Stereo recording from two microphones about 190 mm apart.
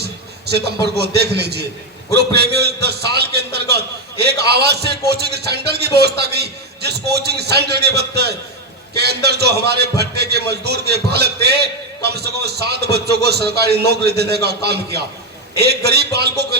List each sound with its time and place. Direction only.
0.0 s a man's voice: 60° right (ahead or behind)